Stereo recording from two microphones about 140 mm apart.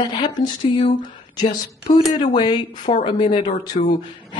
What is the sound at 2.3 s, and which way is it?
Speech, 30° left (ahead or behind).